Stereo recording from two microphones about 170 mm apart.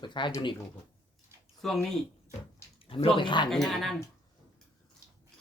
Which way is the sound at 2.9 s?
35° left (ahead or behind).